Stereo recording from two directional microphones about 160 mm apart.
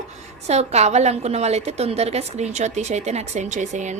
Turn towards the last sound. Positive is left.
turn(degrees=-50)  # may be behind; listen again after turning